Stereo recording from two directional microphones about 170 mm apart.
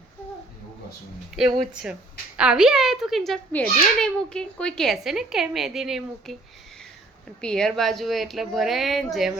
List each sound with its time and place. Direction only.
1.3 s a woman's voice: 5° right (ahead or behind)
7.4 s a woman's voice: 5° left (ahead or behind)